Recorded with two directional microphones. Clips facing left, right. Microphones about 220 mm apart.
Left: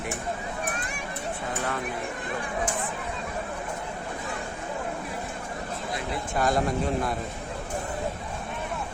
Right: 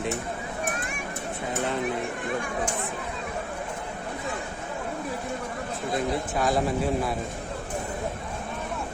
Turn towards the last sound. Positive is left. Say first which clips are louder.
# right 1 dB
turn(degrees=-5)  # may be behind; listen again after turning